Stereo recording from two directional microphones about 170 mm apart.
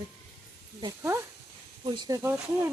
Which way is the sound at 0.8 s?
15° right (ahead or behind).